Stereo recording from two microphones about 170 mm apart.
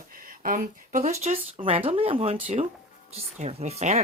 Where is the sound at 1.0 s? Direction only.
40° right (ahead or behind).